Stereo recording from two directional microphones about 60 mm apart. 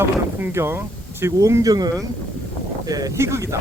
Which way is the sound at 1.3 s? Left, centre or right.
Right.